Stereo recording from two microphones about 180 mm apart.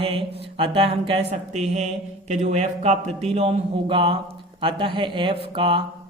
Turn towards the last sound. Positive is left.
turn(degrees=-30)  # may be behind; listen again after turning